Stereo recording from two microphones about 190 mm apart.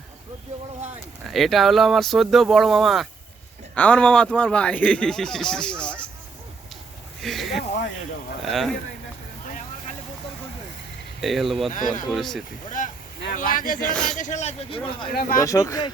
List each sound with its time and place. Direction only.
1.3 s speech: centre (ahead or behind)
7.2 s speech: centre (ahead or behind)
11.2 s speech: centre (ahead or behind)
11.7 s speech: 45° left (ahead or behind)
12.1 s speech: centre (ahead or behind)
12.6 s speech: 45° left (ahead or behind)
13.9 s speech: centre (ahead or behind)
14.2 s speech: 40° left (ahead or behind)
15.1 s speech: 50° left (ahead or behind)
15.4 s speech: 15° left (ahead or behind)